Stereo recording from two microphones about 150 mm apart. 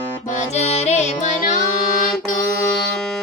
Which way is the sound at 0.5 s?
45° left (ahead or behind).